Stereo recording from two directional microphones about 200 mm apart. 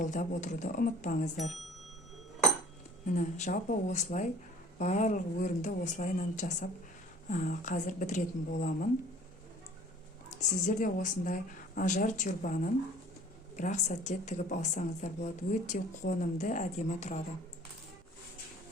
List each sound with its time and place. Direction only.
0.0 s a woman's voice: 40° left (ahead or behind)
1.4 s speech: centre (ahead or behind)
3.2 s a woman's voice: 35° left (ahead or behind)
10.4 s a woman's voice: 35° left (ahead or behind)